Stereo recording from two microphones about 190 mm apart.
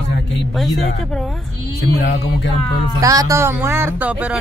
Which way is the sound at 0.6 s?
Centre (ahead or behind).